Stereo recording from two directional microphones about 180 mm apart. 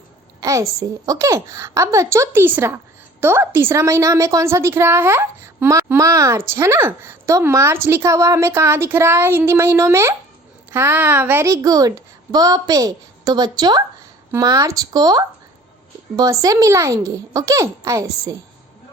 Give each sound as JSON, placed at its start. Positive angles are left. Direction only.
{"t": 0.3, "sound": "a woman's voice", "side_deg": -15}